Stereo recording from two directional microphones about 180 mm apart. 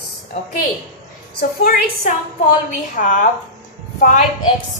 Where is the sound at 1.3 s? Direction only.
55° left (ahead or behind).